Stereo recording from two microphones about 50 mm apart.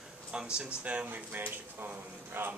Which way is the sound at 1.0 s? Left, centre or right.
Right.